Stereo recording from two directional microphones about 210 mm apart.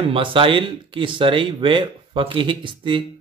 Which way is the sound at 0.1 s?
25° right (ahead or behind).